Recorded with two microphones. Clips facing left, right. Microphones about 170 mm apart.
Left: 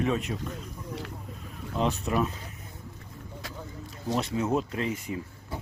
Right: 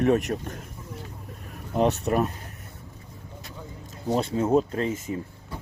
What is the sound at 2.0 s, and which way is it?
Speech, 45° right (ahead or behind).